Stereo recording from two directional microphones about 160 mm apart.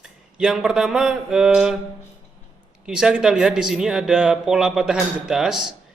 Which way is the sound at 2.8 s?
5° right (ahead or behind).